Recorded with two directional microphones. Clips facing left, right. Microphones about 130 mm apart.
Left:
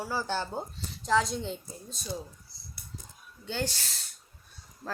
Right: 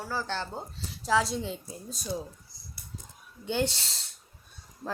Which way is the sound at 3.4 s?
20° right (ahead or behind).